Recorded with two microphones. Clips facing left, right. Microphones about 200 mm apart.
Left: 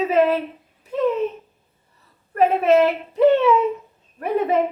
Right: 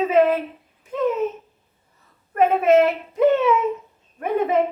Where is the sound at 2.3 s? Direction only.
35° left (ahead or behind).